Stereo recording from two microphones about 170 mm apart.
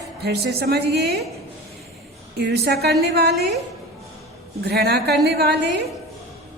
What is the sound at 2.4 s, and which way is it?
Speech, 70° right (ahead or behind).